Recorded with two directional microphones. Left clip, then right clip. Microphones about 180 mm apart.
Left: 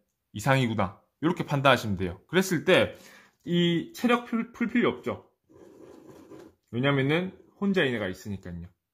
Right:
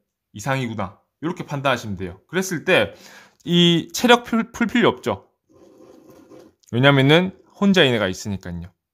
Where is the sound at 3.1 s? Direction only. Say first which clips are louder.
Right 8 dB; 45° right (ahead or behind); by 5.2 s 60° right (ahead or behind).